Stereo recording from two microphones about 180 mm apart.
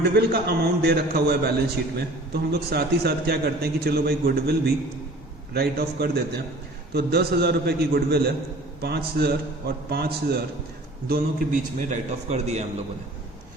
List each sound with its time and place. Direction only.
0.0 s a man's voice: 65° right (ahead or behind)
11.1 s a man's voice: 45° right (ahead or behind)